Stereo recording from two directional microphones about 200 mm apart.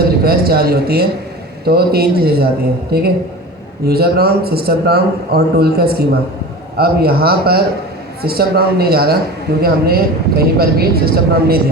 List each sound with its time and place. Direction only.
0.3 s a man's voice: 50° right (ahead or behind)